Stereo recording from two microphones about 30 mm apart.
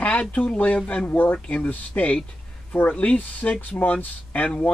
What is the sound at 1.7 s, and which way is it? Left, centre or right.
Speech, left.